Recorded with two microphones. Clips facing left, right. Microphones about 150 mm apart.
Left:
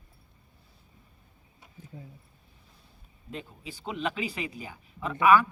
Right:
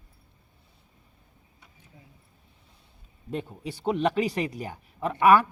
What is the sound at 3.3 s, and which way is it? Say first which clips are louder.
Speech: right 7 dB; 50° right (ahead or behind).